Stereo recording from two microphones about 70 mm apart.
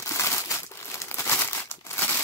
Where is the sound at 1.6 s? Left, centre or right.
Left.